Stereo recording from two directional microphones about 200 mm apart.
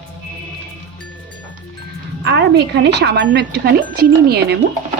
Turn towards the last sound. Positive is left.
turn(degrees=-50)  # may be behind; listen again after turning